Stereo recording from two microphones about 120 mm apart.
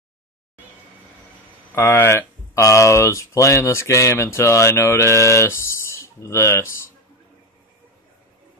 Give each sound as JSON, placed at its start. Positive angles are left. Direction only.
{"t": 1.8, "sound": "speech", "side_deg": 20}